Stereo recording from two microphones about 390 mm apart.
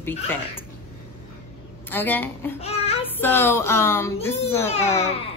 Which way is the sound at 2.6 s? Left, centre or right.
Centre.